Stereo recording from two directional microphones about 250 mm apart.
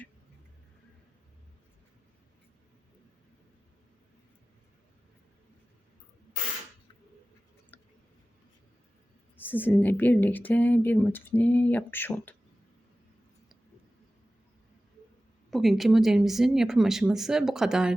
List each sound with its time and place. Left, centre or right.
7.7 s a sound: centre
9.4 s speech: centre
15.4 s speech: centre